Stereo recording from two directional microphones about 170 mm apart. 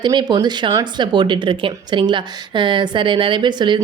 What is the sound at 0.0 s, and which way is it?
Speech, 25° right (ahead or behind).